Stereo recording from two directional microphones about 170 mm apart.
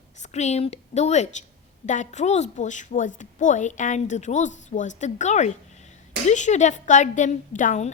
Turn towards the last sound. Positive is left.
turn(degrees=50)  # may be behind; listen again after turning